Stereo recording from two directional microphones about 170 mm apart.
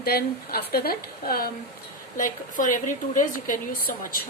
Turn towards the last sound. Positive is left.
turn(degrees=55)  # may be behind; listen again after turning